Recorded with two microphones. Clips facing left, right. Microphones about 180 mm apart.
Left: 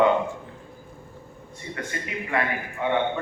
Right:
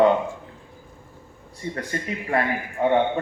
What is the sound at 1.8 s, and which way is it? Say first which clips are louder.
A man's voice: right 1 dB; 35° right (ahead or behind).